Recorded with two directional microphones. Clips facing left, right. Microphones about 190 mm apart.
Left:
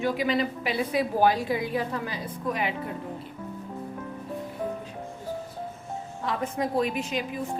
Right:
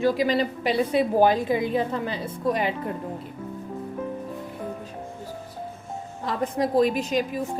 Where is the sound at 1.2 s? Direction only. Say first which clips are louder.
Right 2 dB; 20° right (ahead or behind); by 2.9 s 35° right (ahead or behind).